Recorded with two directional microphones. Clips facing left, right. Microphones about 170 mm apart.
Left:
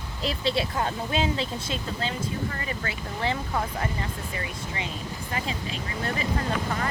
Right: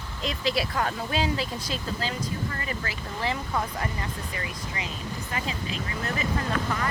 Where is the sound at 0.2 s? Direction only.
30° left (ahead or behind).